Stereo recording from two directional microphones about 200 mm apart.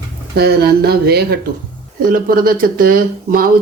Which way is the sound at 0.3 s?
50° right (ahead or behind).